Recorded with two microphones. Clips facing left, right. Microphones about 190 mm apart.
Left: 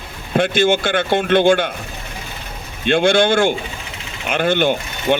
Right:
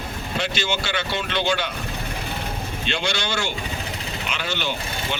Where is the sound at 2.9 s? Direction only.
55° left (ahead or behind).